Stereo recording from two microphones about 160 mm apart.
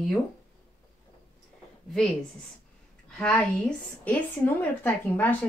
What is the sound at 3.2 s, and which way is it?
Speech, 5° left (ahead or behind).